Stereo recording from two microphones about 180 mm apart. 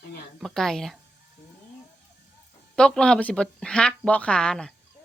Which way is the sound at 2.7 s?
5° left (ahead or behind).